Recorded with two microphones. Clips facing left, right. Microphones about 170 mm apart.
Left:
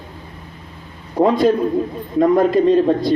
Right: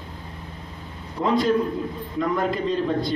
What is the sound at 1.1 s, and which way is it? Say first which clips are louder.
Speech: left 8 dB; 55° left (ahead or behind).